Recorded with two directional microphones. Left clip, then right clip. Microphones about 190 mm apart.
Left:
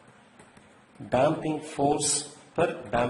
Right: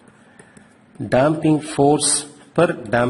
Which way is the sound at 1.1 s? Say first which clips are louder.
Right 8 dB; 45° right (ahead or behind).